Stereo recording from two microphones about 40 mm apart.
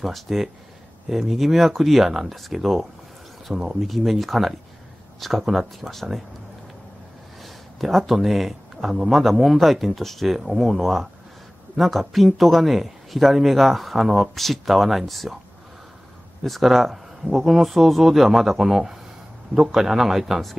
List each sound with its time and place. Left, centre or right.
0.0 s a man's voice: centre
3.8 s a man's voice: centre
7.4 s a sound: centre
8.1 s a man's voice: centre
16.4 s a man's voice: centre